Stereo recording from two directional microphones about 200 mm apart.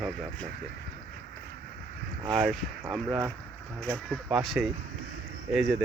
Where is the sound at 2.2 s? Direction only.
Centre (ahead or behind).